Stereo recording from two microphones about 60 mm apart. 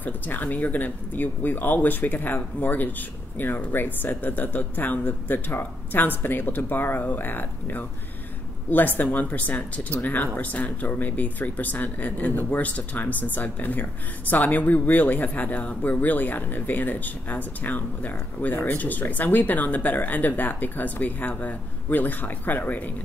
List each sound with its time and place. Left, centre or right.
0.0 s speech: left